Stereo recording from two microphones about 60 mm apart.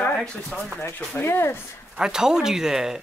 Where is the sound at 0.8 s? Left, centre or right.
Left.